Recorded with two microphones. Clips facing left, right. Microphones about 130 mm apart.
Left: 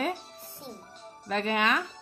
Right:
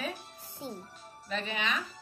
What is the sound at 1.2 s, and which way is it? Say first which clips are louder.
Speech: left 7 dB; 60° left (ahead or behind).